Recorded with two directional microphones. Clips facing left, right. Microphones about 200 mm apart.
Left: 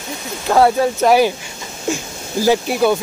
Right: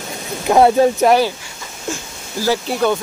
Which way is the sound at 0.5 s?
15° right (ahead or behind).